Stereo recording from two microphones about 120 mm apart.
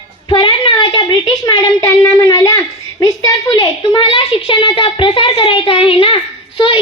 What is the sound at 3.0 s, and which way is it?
A woman's voice, 30° left (ahead or behind).